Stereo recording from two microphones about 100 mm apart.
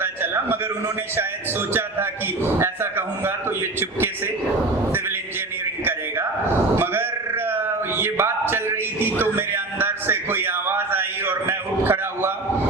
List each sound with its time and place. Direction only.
0.0 s a sound: 20° right (ahead or behind)
1.7 s a man's voice: 25° right (ahead or behind)
6.7 s sheep: 20° right (ahead or behind)
7.9 s music: 20° right (ahead or behind)